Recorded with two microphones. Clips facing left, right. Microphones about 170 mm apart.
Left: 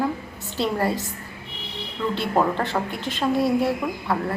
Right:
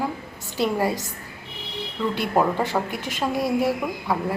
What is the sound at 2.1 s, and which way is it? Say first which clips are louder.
Speech: even; 10° right (ahead or behind).